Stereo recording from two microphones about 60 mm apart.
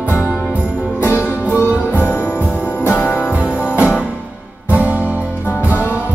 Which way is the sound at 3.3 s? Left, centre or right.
Right.